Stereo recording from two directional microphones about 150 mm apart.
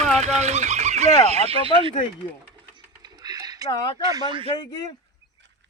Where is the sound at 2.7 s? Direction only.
25° right (ahead or behind).